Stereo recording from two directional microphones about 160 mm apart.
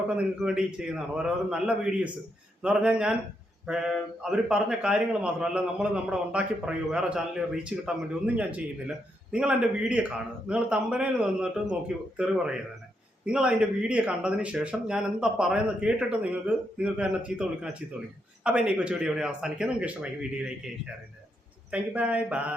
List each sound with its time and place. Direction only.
0.2 s a man's voice: 5° right (ahead or behind)
21.7 s speech: 10° right (ahead or behind)